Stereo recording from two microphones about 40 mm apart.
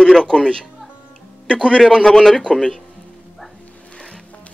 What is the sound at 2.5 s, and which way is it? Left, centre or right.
Speech, left.